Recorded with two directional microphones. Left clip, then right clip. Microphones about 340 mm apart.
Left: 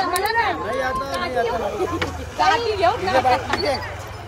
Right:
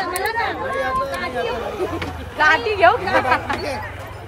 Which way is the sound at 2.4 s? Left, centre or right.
Right.